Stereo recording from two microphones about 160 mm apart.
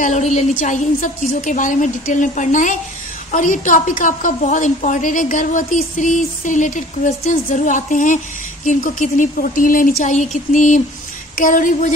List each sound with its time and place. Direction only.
0.0 s a woman's voice: 50° left (ahead or behind)